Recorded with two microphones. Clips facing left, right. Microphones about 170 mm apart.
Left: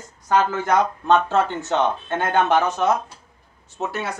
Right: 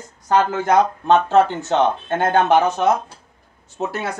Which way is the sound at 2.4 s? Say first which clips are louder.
Right 3 dB; 25° right (ahead or behind).